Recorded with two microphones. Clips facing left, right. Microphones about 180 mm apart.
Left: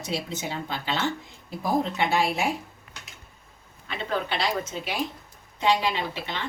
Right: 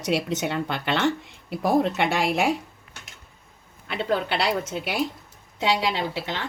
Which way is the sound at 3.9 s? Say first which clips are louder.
Right 4 dB; 70° right (ahead or behind).